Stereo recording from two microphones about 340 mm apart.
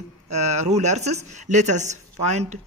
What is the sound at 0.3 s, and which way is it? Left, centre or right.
Speech, centre.